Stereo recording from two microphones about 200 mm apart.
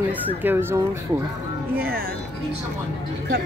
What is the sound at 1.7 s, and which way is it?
Speech, 50° right (ahead or behind).